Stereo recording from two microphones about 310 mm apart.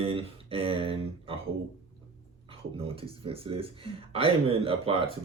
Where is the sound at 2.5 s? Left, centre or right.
Centre.